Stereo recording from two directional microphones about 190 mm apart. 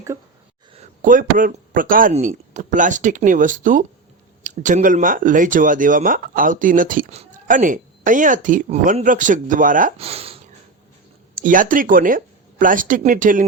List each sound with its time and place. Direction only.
0.7 s speech: 40° right (ahead or behind)
10.0 s a sound: 30° right (ahead or behind)
11.4 s speech: 45° right (ahead or behind)